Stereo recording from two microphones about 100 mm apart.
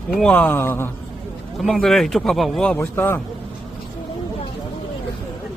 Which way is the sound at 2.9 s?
25° left (ahead or behind).